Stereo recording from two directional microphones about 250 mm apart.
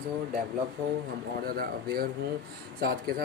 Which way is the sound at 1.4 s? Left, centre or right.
Right.